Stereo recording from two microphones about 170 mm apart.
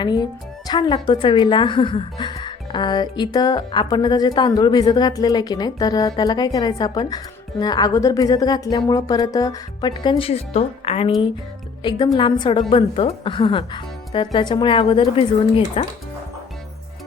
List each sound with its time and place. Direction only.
0.0 s a woman's voice: 25° left (ahead or behind)